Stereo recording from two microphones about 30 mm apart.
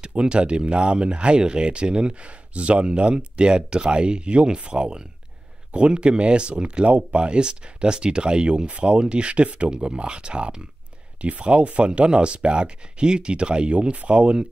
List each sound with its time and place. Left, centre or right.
0.0 s speech: right
11.1 s speech: right